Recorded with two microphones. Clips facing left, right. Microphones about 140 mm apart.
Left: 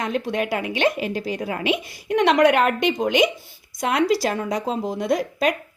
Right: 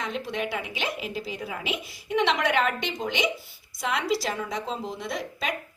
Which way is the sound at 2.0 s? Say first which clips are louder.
Left 8 dB; 50° left (ahead or behind).